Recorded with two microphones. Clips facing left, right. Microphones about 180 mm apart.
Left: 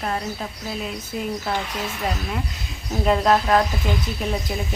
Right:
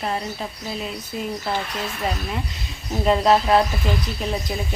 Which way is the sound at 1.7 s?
Centre (ahead or behind).